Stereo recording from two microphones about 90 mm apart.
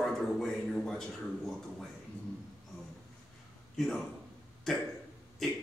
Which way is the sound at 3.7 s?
Centre (ahead or behind).